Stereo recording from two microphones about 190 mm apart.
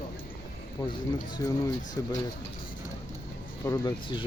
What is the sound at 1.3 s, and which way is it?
Speech, 20° left (ahead or behind).